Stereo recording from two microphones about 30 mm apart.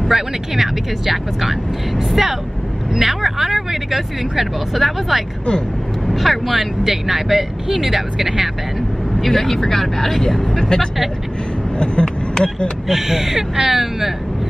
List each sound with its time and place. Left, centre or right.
0.1 s speech: centre
9.2 s speech: centre
10.6 s speech: left
12.8 s speech: centre